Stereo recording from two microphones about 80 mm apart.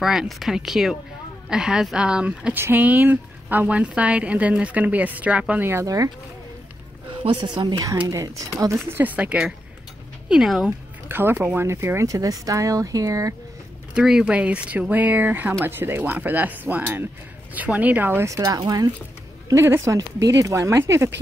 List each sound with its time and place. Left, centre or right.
0.0 s speech: centre
2.5 s speech: right
5.6 s speech: right
7.1 s speech: right
8.1 s speech: right
8.9 s speech: right
11.1 s speech: right
13.9 s speech: centre
18.2 s speech: right
19.5 s speech: right